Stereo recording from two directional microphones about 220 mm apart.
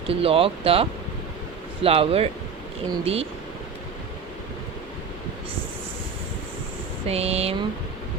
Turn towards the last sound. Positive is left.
turn(degrees=-25)  # may be behind; listen again after turning